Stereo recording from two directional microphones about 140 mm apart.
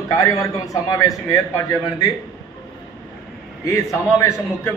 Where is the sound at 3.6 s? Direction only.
25° left (ahead or behind).